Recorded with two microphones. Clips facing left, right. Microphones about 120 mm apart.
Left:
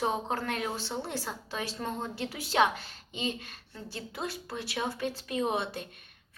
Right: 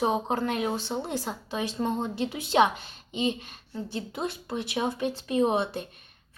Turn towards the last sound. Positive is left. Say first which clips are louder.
# right 6 dB
turn(degrees=-25)  # may be behind; listen again after turning